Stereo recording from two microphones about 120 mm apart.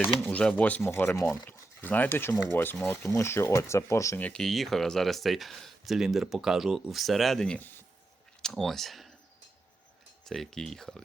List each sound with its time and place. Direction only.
0.3 s speech: 10° left (ahead or behind)
4.2 s speech: 5° left (ahead or behind)
7.6 s speech: 15° left (ahead or behind)
8.4 s a sound: 5° left (ahead or behind)
10.2 s speech: 5° left (ahead or behind)